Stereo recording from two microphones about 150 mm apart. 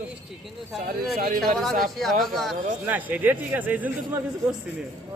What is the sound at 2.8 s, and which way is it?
A man's voice, 10° right (ahead or behind).